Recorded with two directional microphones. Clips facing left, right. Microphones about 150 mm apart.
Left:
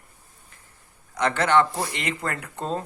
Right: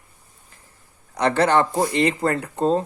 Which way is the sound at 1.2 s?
35° right (ahead or behind).